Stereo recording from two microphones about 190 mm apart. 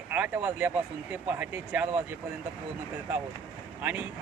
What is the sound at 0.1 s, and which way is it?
Speech, 10° right (ahead or behind).